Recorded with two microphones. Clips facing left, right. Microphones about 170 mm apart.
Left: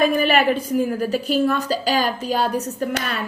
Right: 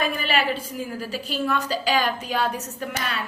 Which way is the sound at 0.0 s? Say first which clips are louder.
Left 7 dB; 50° left (ahead or behind).